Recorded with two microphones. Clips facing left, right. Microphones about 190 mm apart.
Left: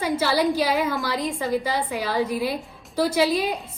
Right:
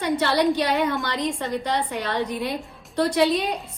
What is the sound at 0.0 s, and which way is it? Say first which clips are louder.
A woman's voice: right 1 dB; centre (ahead or behind).